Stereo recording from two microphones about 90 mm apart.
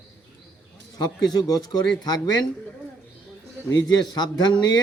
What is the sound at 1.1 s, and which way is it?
A man's voice, 45° left (ahead or behind).